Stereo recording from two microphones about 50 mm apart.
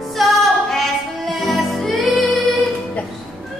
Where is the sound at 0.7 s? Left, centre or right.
Centre.